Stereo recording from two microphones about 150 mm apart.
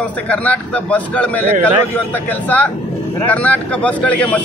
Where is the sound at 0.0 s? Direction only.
10° left (ahead or behind).